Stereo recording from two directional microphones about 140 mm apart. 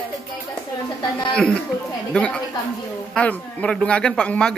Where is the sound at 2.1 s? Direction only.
5° left (ahead or behind).